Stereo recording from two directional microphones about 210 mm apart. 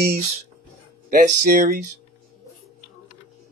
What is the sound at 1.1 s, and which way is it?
Speech, 40° right (ahead or behind).